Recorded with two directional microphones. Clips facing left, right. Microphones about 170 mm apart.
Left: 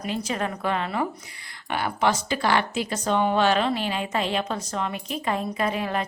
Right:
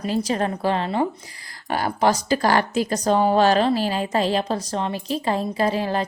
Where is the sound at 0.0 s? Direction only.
35° right (ahead or behind).